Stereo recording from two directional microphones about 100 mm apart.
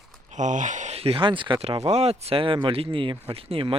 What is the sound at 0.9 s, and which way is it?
Speech, 80° right.